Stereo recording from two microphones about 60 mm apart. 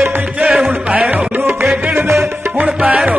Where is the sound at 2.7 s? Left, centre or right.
Centre.